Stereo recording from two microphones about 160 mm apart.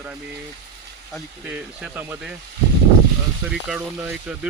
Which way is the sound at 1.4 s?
10° right (ahead or behind).